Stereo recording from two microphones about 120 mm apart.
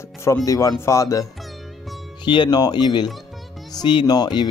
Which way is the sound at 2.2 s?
40° left (ahead or behind).